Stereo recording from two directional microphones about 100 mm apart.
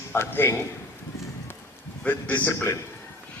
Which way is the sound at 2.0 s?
20° left (ahead or behind).